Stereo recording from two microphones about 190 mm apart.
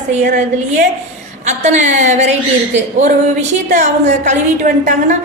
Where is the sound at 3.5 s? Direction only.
40° right (ahead or behind).